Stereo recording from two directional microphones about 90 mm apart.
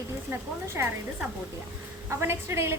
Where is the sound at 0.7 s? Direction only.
20° right (ahead or behind).